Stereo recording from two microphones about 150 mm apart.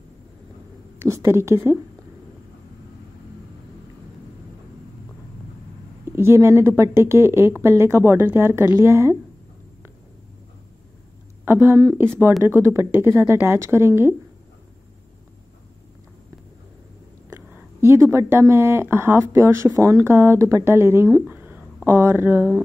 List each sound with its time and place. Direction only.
0.9 s speech: 20° right (ahead or behind)
6.1 s speech: 15° right (ahead or behind)
11.4 s speech: 15° right (ahead or behind)
17.3 s speech: 15° right (ahead or behind)